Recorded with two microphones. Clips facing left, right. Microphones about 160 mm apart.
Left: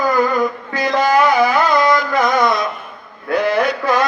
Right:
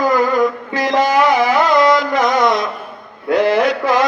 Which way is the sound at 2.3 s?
90° right.